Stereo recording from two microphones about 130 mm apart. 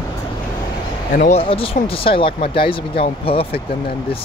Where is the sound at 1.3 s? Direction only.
45° left (ahead or behind).